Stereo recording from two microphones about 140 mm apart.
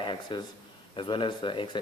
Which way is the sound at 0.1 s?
35° left (ahead or behind).